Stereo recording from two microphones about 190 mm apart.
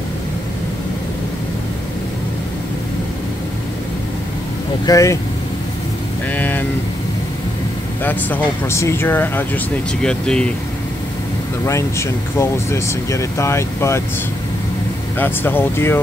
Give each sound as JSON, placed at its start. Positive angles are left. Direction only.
{"t": 4.8, "sound": "speech", "side_deg": 15}
{"t": 6.3, "sound": "vehicle", "side_deg": 10}
{"t": 8.0, "sound": "speech", "side_deg": 10}
{"t": 11.6, "sound": "speech", "side_deg": 15}
{"t": 15.1, "sound": "speech", "side_deg": 10}